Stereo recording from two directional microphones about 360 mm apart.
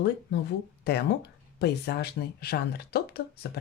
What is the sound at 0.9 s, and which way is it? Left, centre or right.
Speech, left.